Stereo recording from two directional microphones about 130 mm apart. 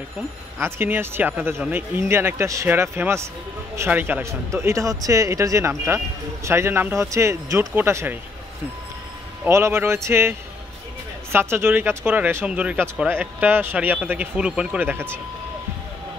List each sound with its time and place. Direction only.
0.6 s speech: 20° right (ahead or behind)
9.4 s speech: 20° right (ahead or behind)
11.3 s speech: 20° right (ahead or behind)